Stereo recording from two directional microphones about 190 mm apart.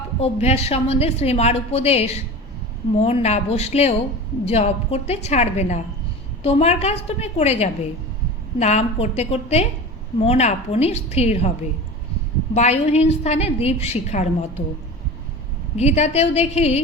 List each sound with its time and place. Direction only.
0.2 s a woman's voice: 35° left (ahead or behind)
12.5 s a woman's voice: 35° left (ahead or behind)
15.8 s a woman's voice: 35° left (ahead or behind)